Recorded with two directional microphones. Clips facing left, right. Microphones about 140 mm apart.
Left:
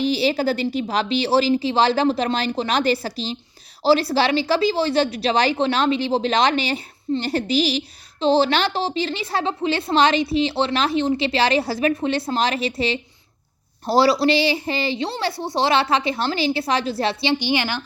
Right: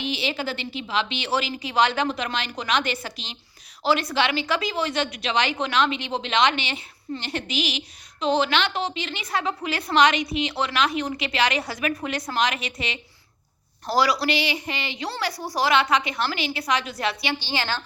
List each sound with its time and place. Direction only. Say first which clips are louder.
0.0 s a woman's voice: left 8 dB; 35° left (ahead or behind)
17.4 s a woman's voice: left 6 dB; 15° left (ahead or behind)